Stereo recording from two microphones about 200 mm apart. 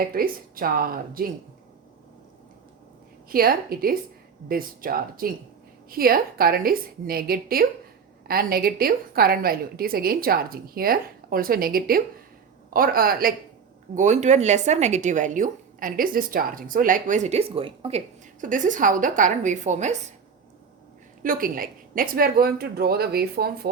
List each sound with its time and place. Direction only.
0.1 s a woman's voice: 45° right (ahead or behind)
3.2 s a woman's voice: 45° right (ahead or behind)
13.9 s speech: 35° right (ahead or behind)
21.2 s a woman's voice: 45° right (ahead or behind)